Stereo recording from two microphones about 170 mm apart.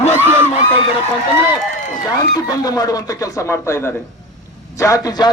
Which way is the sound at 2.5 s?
20° left (ahead or behind).